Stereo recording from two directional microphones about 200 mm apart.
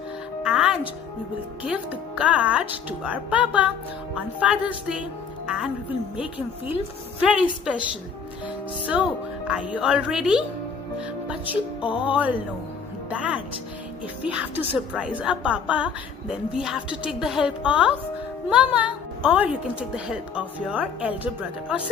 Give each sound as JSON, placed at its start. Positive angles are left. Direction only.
{"t": 0.4, "sound": "music", "side_deg": -5}
{"t": 1.6, "sound": "a woman's voice", "side_deg": -5}
{"t": 8.9, "sound": "a woman's voice", "side_deg": -5}
{"t": 12.0, "sound": "a woman's voice", "side_deg": -5}